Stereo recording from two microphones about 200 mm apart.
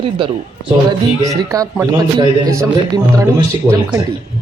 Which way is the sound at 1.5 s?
15° right (ahead or behind).